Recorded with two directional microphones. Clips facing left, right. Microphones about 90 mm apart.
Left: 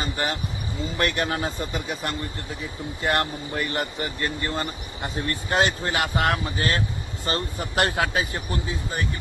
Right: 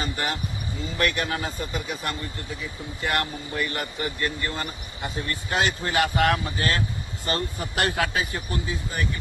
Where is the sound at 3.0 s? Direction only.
35° left (ahead or behind).